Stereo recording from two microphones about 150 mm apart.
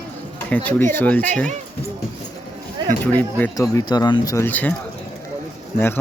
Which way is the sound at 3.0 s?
10° left (ahead or behind).